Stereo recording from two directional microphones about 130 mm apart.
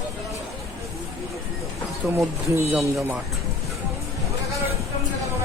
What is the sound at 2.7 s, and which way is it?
Speech, centre (ahead or behind).